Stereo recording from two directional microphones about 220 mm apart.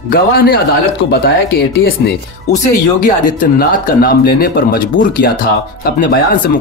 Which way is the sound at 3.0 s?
35° left (ahead or behind).